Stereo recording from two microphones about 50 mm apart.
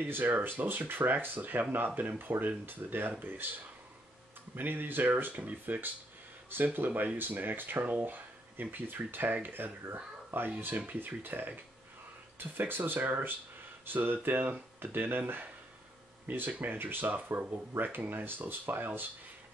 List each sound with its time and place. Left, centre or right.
0.0 s speech: right
5.2 s speech: right